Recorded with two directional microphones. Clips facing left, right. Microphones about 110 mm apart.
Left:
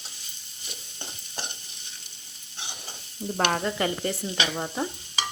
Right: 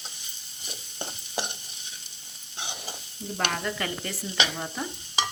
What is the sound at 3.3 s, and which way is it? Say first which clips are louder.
Stir: left 4 dB; 30° left (ahead or behind).